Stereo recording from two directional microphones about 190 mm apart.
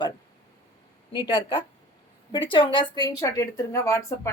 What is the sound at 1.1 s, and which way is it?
Speech, 25° left (ahead or behind).